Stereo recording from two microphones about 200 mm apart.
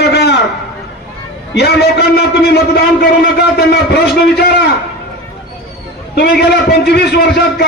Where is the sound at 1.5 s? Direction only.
55° left (ahead or behind).